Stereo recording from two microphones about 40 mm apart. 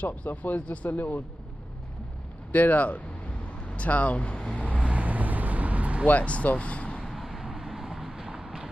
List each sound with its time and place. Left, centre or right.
0.0 s speech: left
2.5 s speech: left
4.8 s vehicle: right
6.0 s speech: left
7.2 s vehicle: centre
8.3 s a sound: centre